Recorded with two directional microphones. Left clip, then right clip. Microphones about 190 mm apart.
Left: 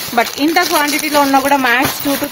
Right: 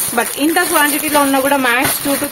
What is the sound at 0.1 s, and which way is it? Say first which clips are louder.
Speech: left 2 dB; 35° left (ahead or behind).